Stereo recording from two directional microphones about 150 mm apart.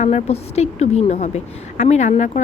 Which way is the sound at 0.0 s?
45° left (ahead or behind).